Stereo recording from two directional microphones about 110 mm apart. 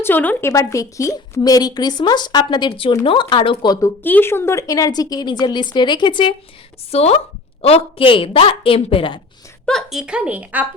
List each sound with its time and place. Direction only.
0.0 s speech: 15° left (ahead or behind)
0.5 s a woman's voice: 30° left (ahead or behind); by 3.8 s 45° left (ahead or behind)
4.0 s a woman's voice: 20° left (ahead or behind); by 6.3 s 45° left (ahead or behind)
6.9 s a woman's voice: 70° left (ahead or behind); by 9.2 s 50° left (ahead or behind)
9.6 s a woman's voice: centre (ahead or behind)